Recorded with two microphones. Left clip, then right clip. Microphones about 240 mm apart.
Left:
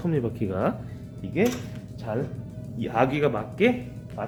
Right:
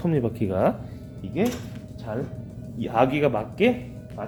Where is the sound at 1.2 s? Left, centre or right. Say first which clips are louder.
Left 1 dB; centre.